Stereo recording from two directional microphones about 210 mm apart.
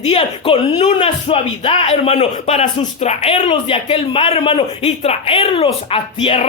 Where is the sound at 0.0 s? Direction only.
25° left (ahead or behind).